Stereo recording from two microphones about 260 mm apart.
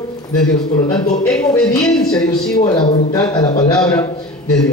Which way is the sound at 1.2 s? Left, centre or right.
Centre.